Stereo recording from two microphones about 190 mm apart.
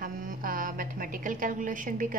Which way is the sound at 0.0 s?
50° right (ahead or behind).